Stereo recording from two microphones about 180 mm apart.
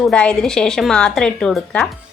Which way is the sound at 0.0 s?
5° left (ahead or behind).